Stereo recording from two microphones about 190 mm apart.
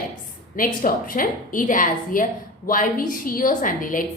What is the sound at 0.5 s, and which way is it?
A woman's voice, 45° left (ahead or behind).